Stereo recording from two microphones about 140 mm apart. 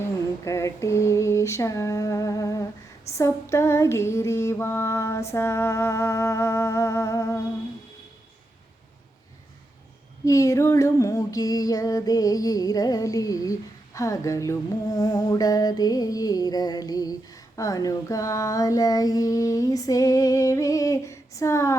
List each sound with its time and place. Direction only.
0.0 s a sound: 20° left (ahead or behind)
3.1 s female singing: 20° left (ahead or behind)
10.2 s female singing: 25° left (ahead or behind)